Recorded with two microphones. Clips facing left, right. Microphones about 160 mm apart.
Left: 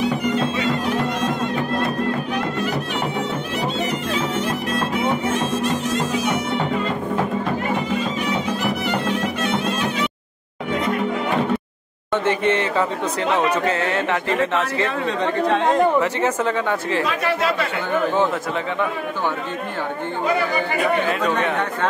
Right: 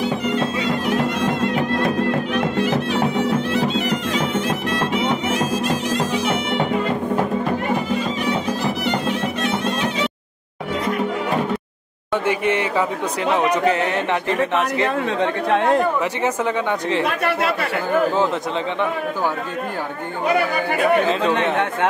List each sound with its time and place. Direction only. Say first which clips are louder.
12.3 s speech: left 1 dB; 15° right (ahead or behind)
15.0 s speech: even; 60° right (ahead or behind)
16.0 s speech: left 1 dB; 15° right (ahead or behind)